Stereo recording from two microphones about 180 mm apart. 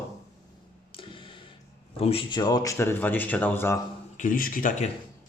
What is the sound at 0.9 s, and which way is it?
Tick-tock, 30° left (ahead or behind).